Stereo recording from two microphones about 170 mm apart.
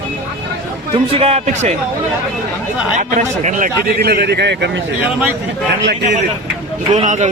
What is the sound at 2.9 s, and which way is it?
Speech, 45° right (ahead or behind).